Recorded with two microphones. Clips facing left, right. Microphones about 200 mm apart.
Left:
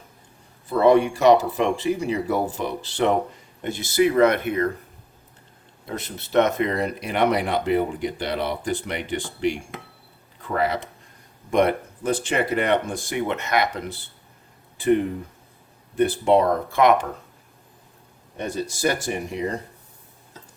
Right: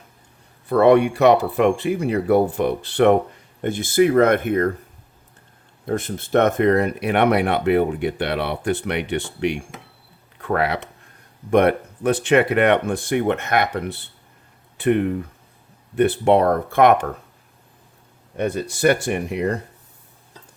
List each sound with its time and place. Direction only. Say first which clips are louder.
0.7 s speech: right 3 dB; 60° right (ahead or behind)
5.8 s speech: right 8 dB; 50° right (ahead or behind)
18.3 s speech: right 5 dB; 60° right (ahead or behind)